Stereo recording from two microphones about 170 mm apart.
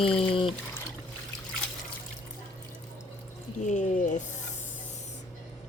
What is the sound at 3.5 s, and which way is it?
Speech, 45° left (ahead or behind).